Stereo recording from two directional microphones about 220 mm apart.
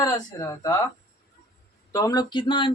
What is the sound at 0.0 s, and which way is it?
Speech, 15° left (ahead or behind).